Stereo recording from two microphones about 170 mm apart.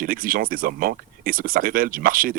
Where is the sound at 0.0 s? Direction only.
55° right (ahead or behind).